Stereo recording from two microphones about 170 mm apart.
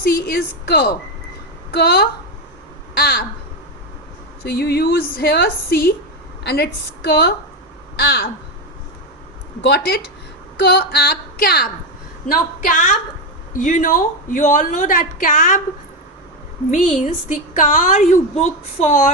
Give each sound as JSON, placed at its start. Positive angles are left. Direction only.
{"t": 0.3, "sound": "a woman's voice", "side_deg": 70}
{"t": 4.4, "sound": "a woman's voice", "side_deg": 70}
{"t": 9.6, "sound": "a woman's voice", "side_deg": 70}
{"t": 12.3, "sound": "a woman's voice", "side_deg": 50}
{"t": 16.7, "sound": "a woman's voice", "side_deg": 45}